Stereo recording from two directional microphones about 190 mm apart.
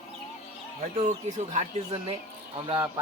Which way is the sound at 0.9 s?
35° right (ahead or behind).